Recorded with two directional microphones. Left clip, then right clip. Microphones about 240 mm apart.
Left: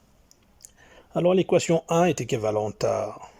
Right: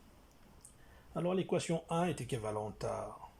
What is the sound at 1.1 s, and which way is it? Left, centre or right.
Speech, left.